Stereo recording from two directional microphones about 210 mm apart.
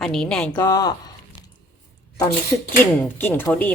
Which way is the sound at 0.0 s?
Centre (ahead or behind).